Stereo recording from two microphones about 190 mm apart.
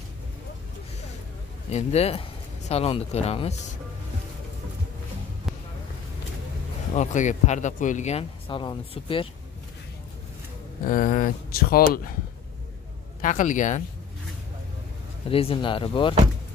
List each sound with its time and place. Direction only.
1.7 s speech: 35° left (ahead or behind)
6.9 s speech: 40° left (ahead or behind)
10.9 s speech: 45° left (ahead or behind)
13.2 s speech: 40° left (ahead or behind)
15.2 s speech: 30° left (ahead or behind)